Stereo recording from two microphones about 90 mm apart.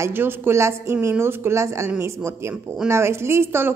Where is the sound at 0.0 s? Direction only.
25° right (ahead or behind).